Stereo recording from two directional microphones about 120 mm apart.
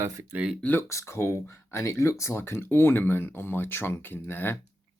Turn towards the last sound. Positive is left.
turn(degrees=15)  # may be behind; listen again after turning